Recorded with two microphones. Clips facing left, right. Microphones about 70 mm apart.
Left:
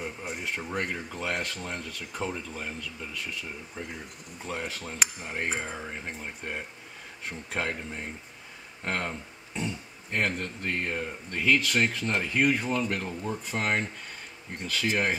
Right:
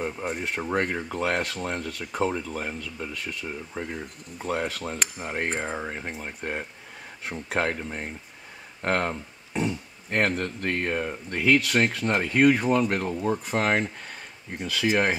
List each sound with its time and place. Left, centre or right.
0.0 s speech: right
0.6 s speech: right
1.0 s speech: right
1.9 s speech: right
4.5 s speech: right
7.2 s speech: right
13.1 s speech: right
13.5 s speech: right